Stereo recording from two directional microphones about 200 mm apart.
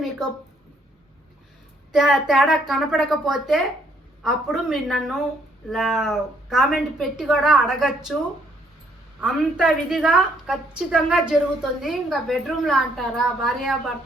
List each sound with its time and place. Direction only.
1.9 s a woman's voice: centre (ahead or behind)
9.2 s a woman's voice: 5° right (ahead or behind)